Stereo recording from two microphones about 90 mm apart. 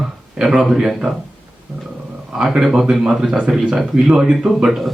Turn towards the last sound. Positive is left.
turn(degrees=-5)  # may be behind; listen again after turning